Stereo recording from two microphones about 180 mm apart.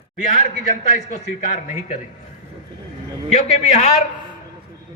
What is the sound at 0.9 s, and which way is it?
A man's voice, 40° left (ahead or behind).